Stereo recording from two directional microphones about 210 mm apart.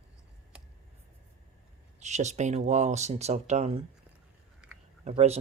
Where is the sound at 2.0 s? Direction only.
35° right (ahead or behind).